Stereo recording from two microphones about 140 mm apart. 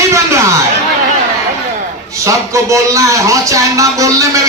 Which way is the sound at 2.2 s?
20° right (ahead or behind).